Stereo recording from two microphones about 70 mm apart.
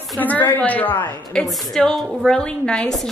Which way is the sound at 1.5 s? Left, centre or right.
Centre.